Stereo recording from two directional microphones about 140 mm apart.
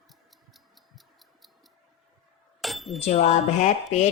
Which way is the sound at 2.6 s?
Centre (ahead or behind).